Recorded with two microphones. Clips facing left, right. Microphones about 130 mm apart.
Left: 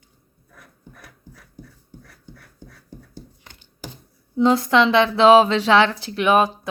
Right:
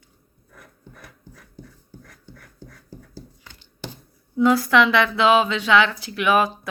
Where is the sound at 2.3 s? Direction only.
15° left (ahead or behind).